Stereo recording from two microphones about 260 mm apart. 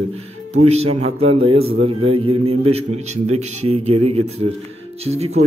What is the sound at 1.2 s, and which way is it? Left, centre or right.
A man's voice, right.